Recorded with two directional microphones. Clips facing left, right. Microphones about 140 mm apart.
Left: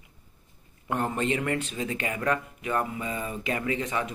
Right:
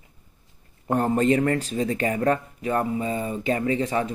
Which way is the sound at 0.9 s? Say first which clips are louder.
Right 7 dB; 40° right (ahead or behind).